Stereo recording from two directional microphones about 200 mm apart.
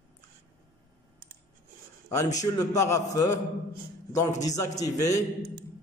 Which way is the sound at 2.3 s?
15° left (ahead or behind).